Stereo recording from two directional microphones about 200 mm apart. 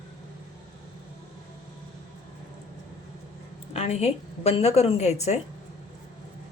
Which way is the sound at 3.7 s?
35° left (ahead or behind).